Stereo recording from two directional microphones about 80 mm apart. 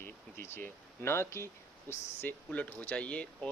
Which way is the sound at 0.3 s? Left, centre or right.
Left.